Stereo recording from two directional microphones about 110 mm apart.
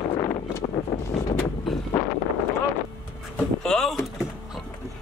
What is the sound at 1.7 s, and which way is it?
Wind noise, centre (ahead or behind).